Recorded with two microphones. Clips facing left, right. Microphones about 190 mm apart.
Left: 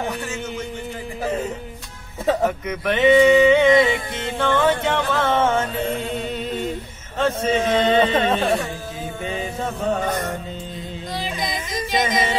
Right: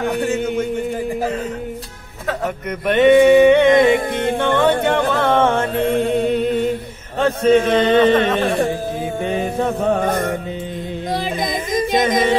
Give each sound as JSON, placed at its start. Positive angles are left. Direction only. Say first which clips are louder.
{"t": 0.1, "sound": "a sound", "louder": "right 9 dB", "side_deg": -55}
{"t": 2.9, "sound": "music", "louder": "right 4 dB", "side_deg": -60}
{"t": 7.2, "sound": "a man's voice", "louder": "right 6 dB", "side_deg": -60}
{"t": 9.2, "sound": "music", "louder": "right 6 dB", "side_deg": -55}
{"t": 11.1, "sound": "yodeling", "louder": "right 5 dB", "side_deg": -50}